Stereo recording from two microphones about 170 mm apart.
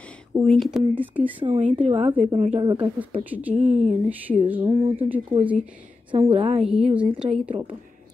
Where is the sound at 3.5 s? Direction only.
45° right (ahead or behind).